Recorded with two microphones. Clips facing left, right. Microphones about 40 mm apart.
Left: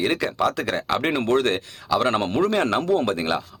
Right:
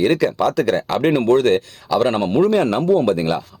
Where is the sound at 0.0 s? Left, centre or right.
Left.